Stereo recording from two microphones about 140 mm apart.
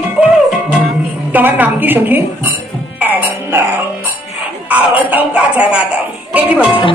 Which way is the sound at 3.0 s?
15° right (ahead or behind).